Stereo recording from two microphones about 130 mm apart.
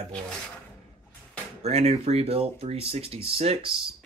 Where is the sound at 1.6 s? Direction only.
55° right (ahead or behind).